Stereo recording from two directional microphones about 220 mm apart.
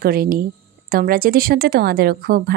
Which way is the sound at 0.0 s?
45° right (ahead or behind).